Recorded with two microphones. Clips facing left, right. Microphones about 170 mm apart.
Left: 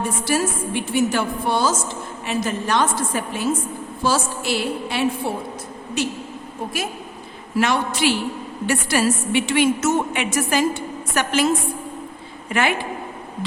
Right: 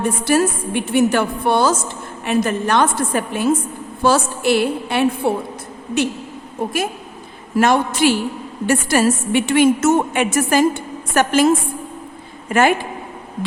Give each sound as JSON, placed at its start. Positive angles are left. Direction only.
{"t": 0.0, "sound": "a woman's voice", "side_deg": -60}
{"t": 7.5, "sound": "a woman's voice", "side_deg": -50}
{"t": 12.5, "sound": "a woman's voice", "side_deg": -45}